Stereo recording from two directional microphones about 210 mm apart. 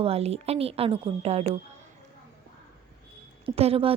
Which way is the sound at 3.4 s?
25° right (ahead or behind).